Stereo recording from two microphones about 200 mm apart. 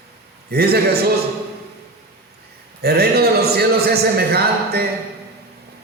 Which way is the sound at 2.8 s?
50° right (ahead or behind).